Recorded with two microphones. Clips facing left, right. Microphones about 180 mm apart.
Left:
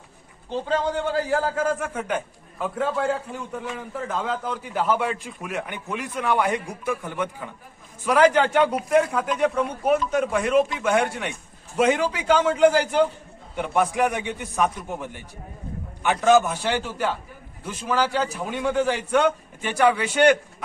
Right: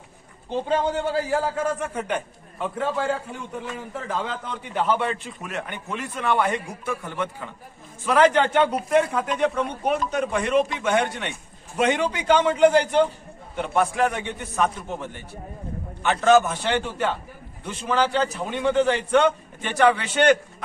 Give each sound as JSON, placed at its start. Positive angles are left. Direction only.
{"t": 0.5, "sound": "a man's voice", "side_deg": -15}
{"t": 1.1, "sound": "a man's voice", "side_deg": 0}